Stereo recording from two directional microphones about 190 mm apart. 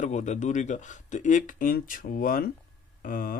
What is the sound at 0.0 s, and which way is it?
Speech, 40° left (ahead or behind).